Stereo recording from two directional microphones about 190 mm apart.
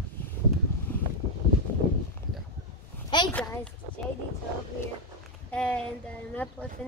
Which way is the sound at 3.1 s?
25° left (ahead or behind).